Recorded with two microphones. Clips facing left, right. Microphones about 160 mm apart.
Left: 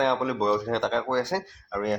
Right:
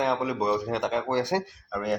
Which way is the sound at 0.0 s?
Centre (ahead or behind).